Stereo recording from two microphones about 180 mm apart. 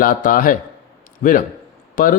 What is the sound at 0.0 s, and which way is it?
A man's voice, 50° left (ahead or behind).